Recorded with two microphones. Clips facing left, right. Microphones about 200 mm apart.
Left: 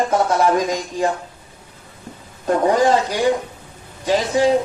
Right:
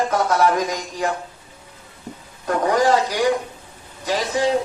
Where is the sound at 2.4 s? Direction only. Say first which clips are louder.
Left 3 dB; 25° left (ahead or behind).